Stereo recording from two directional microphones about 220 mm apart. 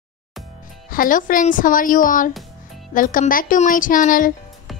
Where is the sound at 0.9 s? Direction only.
40° left (ahead or behind).